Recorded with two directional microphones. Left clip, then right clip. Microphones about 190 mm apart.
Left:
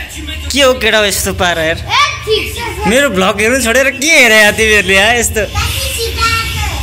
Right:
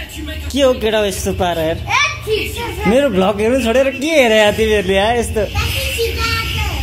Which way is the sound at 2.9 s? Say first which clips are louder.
Left 3 dB; 10° right (ahead or behind).